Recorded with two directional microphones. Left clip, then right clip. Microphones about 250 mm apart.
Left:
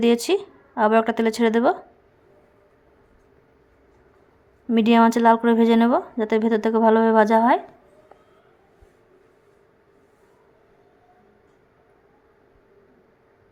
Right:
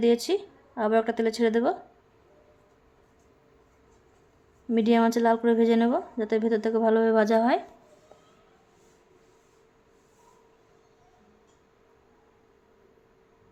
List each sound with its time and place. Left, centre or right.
0.0 s a woman's voice: centre
4.7 s a woman's voice: centre